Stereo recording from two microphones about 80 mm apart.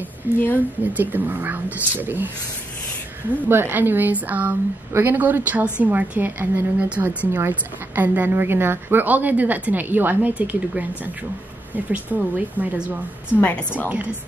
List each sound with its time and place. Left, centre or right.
0.3 s a woman's voice: right
3.4 s a woman's voice: right
11.7 s a woman's voice: centre